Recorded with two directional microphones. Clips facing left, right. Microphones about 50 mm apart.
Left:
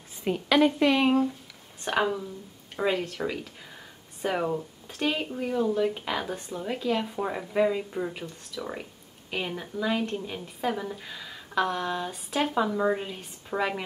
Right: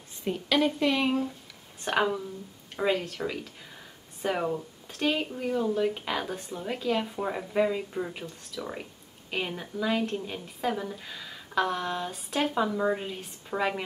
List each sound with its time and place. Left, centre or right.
0.5 s a woman's voice: centre
1.8 s speech: centre